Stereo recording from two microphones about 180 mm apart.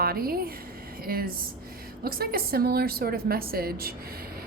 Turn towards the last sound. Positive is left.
turn(degrees=-60)  # may be behind; listen again after turning